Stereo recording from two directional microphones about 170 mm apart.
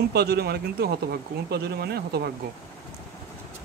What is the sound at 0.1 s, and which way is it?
Speech, 70° right (ahead or behind).